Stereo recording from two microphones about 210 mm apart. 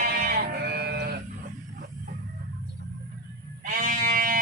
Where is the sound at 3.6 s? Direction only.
40° right (ahead or behind).